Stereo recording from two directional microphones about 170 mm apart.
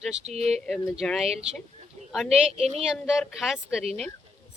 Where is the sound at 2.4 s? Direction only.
40° right (ahead or behind).